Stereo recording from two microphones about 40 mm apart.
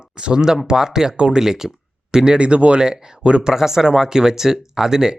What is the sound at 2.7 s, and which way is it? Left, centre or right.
Speech, centre.